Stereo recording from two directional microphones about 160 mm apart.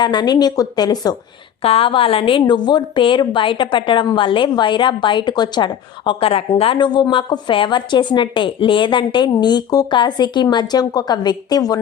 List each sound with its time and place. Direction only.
0.0 s a woman's voice: 25° left (ahead or behind)
1.6 s a woman's voice: 35° left (ahead or behind)